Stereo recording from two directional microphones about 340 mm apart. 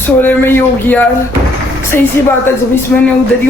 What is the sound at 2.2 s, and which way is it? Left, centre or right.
Speech, centre.